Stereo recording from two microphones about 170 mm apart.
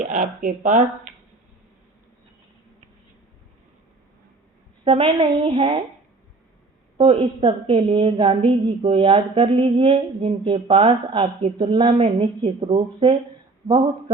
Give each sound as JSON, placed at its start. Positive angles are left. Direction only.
{"t": 0.0, "sound": "speech", "side_deg": -50}
{"t": 4.9, "sound": "a woman's voice", "side_deg": -30}
{"t": 6.9, "sound": "a woman's voice", "side_deg": -35}